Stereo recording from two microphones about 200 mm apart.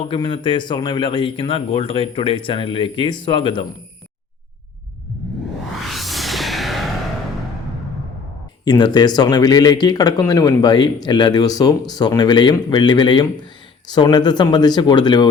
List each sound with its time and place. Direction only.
0.1 s speech: 25° left (ahead or behind)
5.8 s music: centre (ahead or behind)
8.6 s speech: 20° left (ahead or behind)